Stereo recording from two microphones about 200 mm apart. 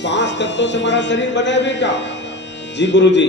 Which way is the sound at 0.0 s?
60° left (ahead or behind).